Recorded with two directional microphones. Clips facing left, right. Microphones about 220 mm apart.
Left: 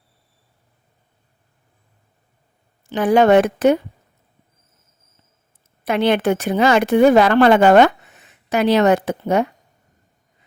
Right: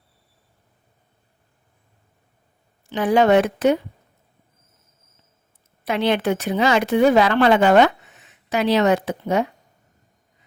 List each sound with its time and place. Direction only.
2.9 s speech: 50° left (ahead or behind)
5.8 s speech: 50° left (ahead or behind)